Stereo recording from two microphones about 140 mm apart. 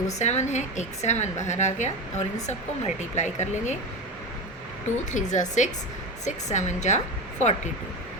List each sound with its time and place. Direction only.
0.2 s speech: 55° left (ahead or behind)
5.1 s speech: 60° left (ahead or behind)